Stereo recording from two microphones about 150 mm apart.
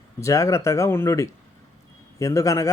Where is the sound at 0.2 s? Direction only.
20° left (ahead or behind).